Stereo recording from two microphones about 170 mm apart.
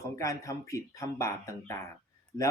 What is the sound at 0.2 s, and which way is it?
Speech, 20° left (ahead or behind).